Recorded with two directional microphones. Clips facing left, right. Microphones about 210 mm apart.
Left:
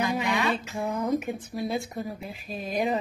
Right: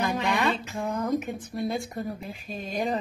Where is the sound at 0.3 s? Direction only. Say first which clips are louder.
Right 1 dB; 55° right (ahead or behind).